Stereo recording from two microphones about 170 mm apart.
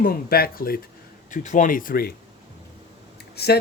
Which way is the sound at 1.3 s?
45° left (ahead or behind).